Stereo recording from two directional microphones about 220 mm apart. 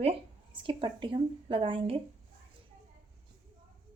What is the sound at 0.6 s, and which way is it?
Speech, 20° right (ahead or behind).